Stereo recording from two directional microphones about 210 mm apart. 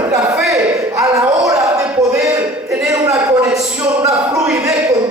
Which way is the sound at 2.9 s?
15° right (ahead or behind).